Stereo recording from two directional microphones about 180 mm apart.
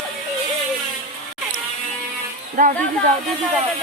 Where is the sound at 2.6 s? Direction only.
50° right (ahead or behind).